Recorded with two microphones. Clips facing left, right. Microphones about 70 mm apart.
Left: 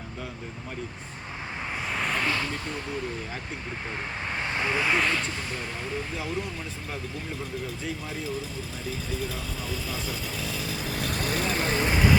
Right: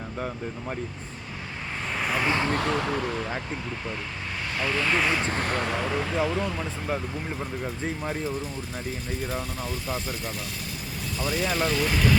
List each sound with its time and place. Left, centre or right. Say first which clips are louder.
1.9 s a sound: right 2 dB; centre
2.2 s speech: right 3 dB; right
2.5 s speech: right 8 dB; right
4.5 s speech: right 1 dB; left
4.9 s speech: right 1 dB; centre
5.3 s speech: right 7 dB; right
10.9 s speech: right 1 dB; left